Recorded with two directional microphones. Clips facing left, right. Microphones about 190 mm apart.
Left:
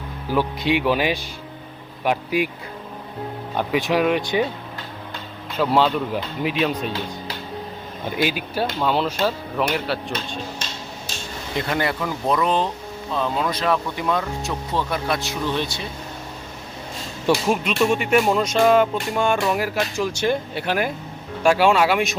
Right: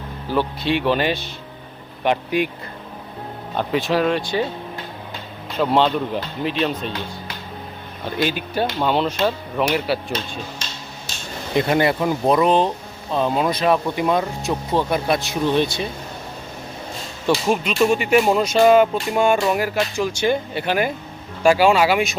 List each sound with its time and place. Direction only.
0.3 s speech: 10° left (ahead or behind)
3.6 s speech: 10° left (ahead or behind)
5.5 s speech: 5° left (ahead or behind)
8.0 s speech: 10° left (ahead or behind)
11.5 s speech: 20° right (ahead or behind)
17.2 s speech: centre (ahead or behind)